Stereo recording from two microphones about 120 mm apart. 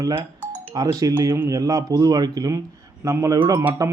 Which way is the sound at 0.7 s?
35° right (ahead or behind).